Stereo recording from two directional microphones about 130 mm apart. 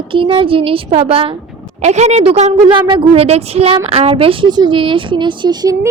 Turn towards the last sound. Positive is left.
turn(degrees=-30)  # may be behind; listen again after turning